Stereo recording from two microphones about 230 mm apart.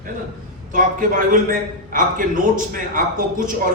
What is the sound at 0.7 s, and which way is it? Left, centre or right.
A man's voice, right.